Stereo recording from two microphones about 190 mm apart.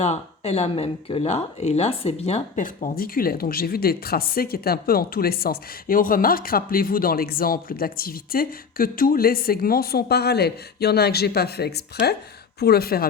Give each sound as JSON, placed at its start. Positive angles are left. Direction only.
{"t": 0.0, "sound": "speech", "side_deg": 35}